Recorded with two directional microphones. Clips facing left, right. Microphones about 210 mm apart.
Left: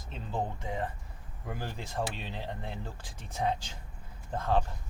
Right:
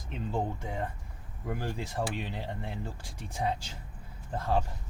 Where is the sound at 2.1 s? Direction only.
15° right (ahead or behind).